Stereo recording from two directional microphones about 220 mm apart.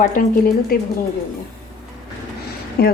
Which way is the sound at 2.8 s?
45° left (ahead or behind).